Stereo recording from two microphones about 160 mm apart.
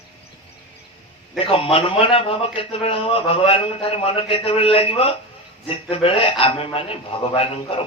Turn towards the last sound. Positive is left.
turn(degrees=35)  # may be behind; listen again after turning